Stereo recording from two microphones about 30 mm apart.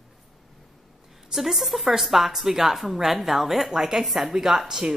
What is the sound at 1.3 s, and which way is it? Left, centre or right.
A woman's voice, centre.